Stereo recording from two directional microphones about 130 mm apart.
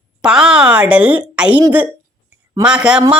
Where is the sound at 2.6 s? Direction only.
5° right (ahead or behind).